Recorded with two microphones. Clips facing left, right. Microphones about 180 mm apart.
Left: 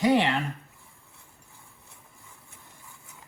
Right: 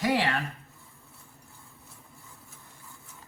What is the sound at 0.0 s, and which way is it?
Speech, 20° left (ahead or behind).